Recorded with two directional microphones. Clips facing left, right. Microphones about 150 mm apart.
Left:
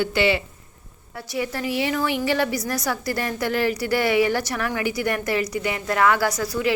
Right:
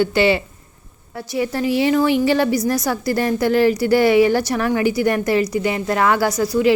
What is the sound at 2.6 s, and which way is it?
A woman's voice, 20° right (ahead or behind).